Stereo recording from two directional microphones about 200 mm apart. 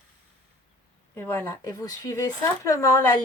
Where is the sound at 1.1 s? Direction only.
10° left (ahead or behind).